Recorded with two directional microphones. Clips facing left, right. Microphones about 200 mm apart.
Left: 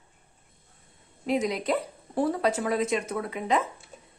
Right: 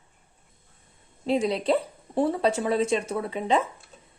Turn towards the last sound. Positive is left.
turn(degrees=-30)  # may be behind; listen again after turning